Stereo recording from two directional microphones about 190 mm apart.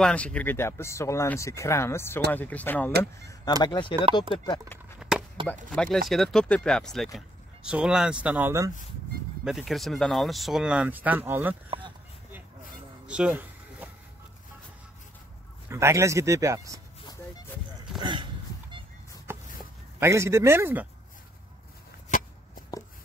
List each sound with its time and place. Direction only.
0.0 s speech: 5° left (ahead or behind); by 3.9 s 25° left (ahead or behind)
5.8 s speech: centre (ahead or behind); by 8.7 s 15° right (ahead or behind)
9.4 s speech: 5° right (ahead or behind)
13.0 s a sound: 5° right (ahead or behind)
15.7 s speech: 15° right (ahead or behind)
17.9 s a sound: 25° right (ahead or behind)
20.0 s speech: 15° right (ahead or behind)